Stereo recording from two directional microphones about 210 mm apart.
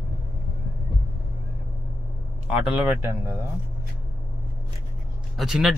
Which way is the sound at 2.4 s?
5° right (ahead or behind).